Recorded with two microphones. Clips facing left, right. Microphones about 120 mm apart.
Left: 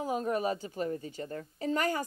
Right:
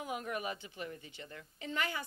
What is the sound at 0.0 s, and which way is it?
A woman's voice, 35° left (ahead or behind).